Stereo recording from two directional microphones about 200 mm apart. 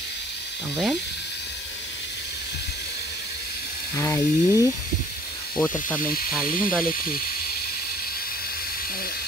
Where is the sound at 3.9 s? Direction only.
15° left (ahead or behind).